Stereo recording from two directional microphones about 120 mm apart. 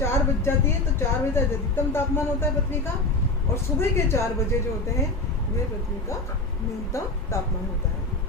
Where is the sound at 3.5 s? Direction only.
20° left (ahead or behind).